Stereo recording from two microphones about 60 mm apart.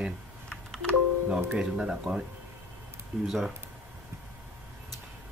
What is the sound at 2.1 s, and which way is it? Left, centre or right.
Speech, right.